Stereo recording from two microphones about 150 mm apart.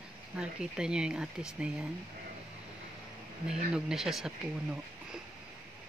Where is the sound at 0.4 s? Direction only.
5° right (ahead or behind).